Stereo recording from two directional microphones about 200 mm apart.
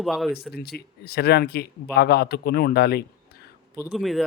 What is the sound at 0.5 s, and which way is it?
Speech, 50° left (ahead or behind).